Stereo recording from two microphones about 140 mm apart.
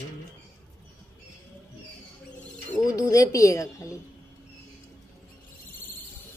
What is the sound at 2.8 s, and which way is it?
A woman's voice, 25° left (ahead or behind).